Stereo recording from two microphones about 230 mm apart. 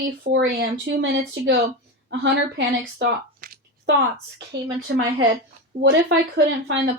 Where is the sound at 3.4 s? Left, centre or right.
Right.